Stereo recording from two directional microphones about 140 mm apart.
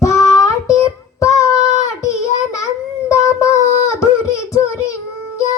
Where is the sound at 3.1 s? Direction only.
20° left (ahead or behind).